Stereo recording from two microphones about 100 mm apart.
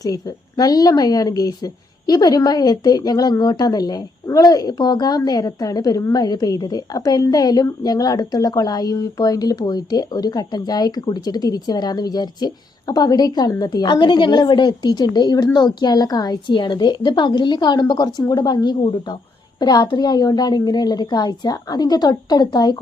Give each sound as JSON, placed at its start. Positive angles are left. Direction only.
{"t": 0.0, "sound": "a woman's voice", "side_deg": 35}